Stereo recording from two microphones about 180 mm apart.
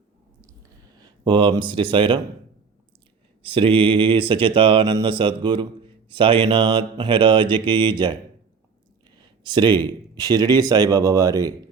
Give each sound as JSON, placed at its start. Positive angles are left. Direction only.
{"t": 0.9, "sound": "speech", "side_deg": -25}
{"t": 3.4, "sound": "speech", "side_deg": -30}
{"t": 9.1, "sound": "speech", "side_deg": -25}